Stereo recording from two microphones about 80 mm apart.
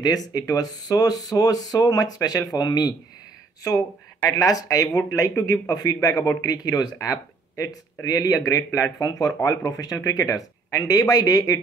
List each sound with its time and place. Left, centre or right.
0.0 s speech: left
3.6 s speech: left